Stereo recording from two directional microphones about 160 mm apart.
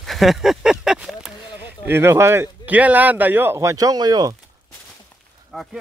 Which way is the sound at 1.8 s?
15° right (ahead or behind).